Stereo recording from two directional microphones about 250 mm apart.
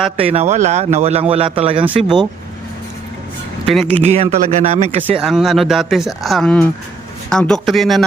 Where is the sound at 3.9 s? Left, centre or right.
Right.